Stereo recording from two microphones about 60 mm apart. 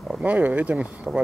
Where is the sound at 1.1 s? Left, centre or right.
Centre.